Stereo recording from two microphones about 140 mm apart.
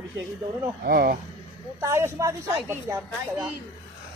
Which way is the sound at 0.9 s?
90° right.